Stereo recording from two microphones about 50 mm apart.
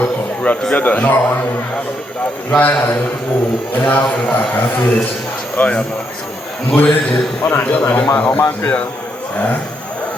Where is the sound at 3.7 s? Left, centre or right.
Left.